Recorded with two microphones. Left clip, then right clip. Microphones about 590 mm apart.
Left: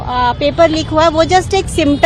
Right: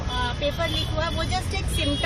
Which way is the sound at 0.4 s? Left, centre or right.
Left.